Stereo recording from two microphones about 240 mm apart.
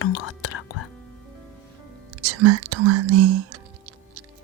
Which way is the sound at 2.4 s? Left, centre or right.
Right.